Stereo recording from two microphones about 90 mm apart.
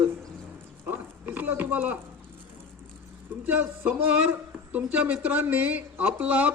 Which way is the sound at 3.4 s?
20° right (ahead or behind).